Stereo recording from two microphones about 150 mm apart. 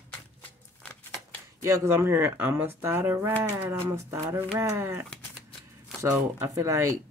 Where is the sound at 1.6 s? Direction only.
20° right (ahead or behind).